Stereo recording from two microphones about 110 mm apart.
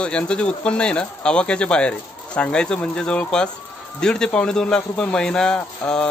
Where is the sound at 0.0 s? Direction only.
10° left (ahead or behind).